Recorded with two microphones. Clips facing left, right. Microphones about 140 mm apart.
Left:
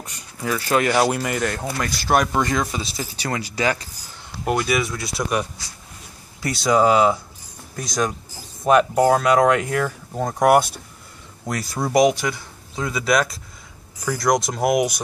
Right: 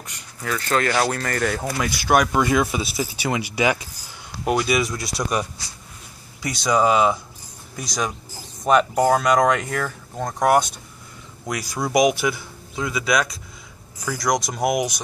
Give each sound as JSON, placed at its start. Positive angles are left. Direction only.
{"t": 0.4, "sound": "speech", "side_deg": 10}
{"t": 1.4, "sound": "speech", "side_deg": -5}
{"t": 4.5, "sound": "speech", "side_deg": 0}
{"t": 6.4, "sound": "speech", "side_deg": 5}